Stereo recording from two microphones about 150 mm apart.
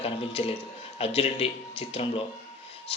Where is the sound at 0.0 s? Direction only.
40° left (ahead or behind).